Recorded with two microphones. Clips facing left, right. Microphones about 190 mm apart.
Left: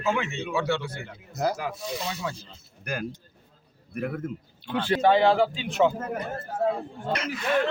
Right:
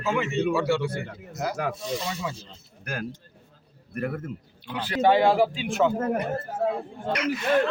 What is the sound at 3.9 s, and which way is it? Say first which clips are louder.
Speech: right 1 dB; centre (ahead or behind).